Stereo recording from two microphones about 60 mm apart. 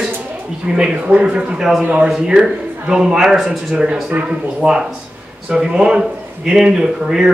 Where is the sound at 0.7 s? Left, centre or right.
Centre.